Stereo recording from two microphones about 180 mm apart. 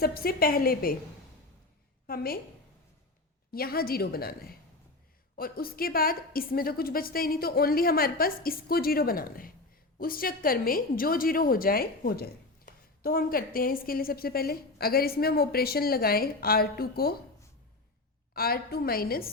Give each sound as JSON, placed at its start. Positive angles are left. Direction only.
{"t": 0.0, "sound": "a woman's voice", "side_deg": 55}
{"t": 2.0, "sound": "a woman's voice", "side_deg": 55}
{"t": 3.5, "sound": "a woman's voice", "side_deg": 55}
{"t": 18.3, "sound": "a woman's voice", "side_deg": 55}